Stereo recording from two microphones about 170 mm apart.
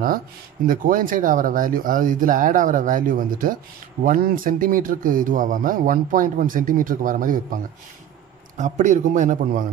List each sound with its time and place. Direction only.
0.7 s speech: 55° right (ahead or behind)
8.5 s speech: 45° right (ahead or behind)